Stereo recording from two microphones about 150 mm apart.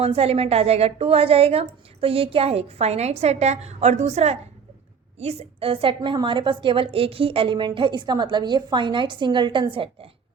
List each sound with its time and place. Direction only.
0.0 s a woman's voice: 40° right (ahead or behind)